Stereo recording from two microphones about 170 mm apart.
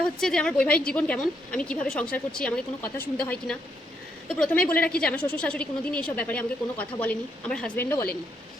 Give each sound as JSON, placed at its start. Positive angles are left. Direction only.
{"t": 0.2, "sound": "a woman's voice", "side_deg": 5}